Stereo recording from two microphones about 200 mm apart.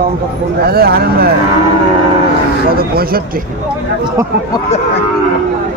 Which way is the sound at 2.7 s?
50° right (ahead or behind).